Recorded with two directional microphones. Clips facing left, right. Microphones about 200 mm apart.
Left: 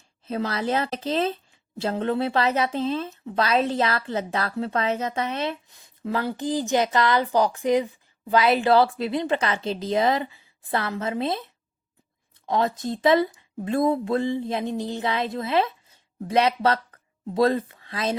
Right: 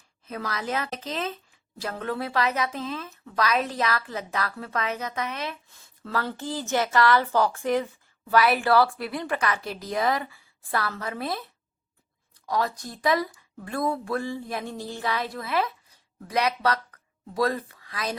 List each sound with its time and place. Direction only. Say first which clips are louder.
0.3 s a woman's voice: left 6 dB; 30° left (ahead or behind)
5.6 s a woman's voice: left 10 dB; 15° left (ahead or behind)
12.5 s a woman's voice: left 4 dB; 25° left (ahead or behind)